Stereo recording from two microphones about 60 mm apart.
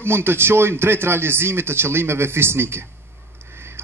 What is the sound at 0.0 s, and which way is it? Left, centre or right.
A man's voice, right.